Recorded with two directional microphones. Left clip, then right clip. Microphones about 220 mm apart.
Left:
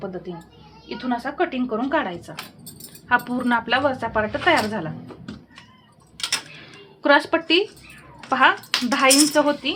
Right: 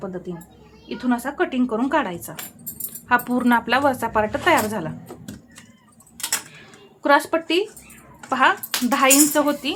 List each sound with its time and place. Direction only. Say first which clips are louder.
0.9 s a woman's voice: right 2 dB; 25° right (ahead or behind)
7.0 s speech: even; 5° right (ahead or behind)